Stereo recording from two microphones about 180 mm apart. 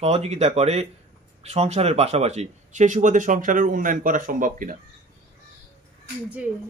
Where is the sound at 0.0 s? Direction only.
35° right (ahead or behind).